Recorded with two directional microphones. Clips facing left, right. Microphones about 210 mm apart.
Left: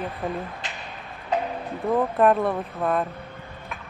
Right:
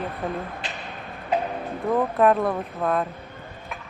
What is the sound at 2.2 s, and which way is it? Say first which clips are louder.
Speech: even; centre (ahead or behind).